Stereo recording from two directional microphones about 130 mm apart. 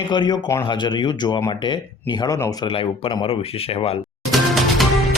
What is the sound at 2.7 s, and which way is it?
Speech, 45° left (ahead or behind).